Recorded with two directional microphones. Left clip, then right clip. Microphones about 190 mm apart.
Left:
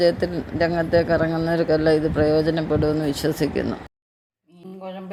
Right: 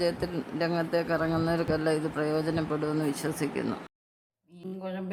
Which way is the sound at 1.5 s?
15° left (ahead or behind).